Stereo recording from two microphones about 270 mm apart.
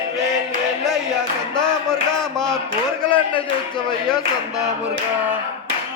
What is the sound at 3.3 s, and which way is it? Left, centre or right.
Speech, centre.